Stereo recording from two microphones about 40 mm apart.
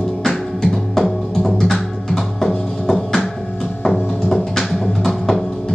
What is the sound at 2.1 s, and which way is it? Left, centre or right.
Music, centre.